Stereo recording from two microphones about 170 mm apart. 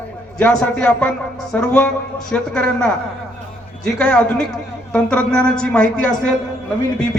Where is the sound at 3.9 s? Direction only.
10° left (ahead or behind).